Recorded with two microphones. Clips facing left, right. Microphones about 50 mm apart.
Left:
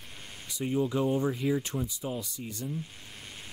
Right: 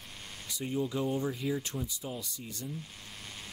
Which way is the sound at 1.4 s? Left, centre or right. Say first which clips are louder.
Left 4 dB; left.